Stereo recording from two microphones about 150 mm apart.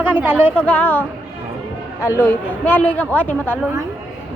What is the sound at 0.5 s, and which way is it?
Speech, 10° left (ahead or behind).